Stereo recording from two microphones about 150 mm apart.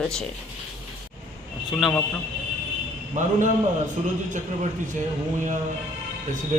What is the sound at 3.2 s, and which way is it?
Speech, 55° right (ahead or behind).